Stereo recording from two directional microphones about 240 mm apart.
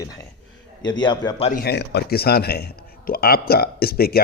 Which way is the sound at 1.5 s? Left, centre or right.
Left.